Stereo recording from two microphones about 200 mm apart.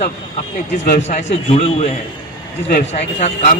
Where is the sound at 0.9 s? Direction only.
35° left (ahead or behind).